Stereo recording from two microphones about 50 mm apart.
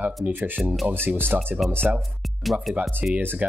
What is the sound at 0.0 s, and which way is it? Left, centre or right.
Speech, right.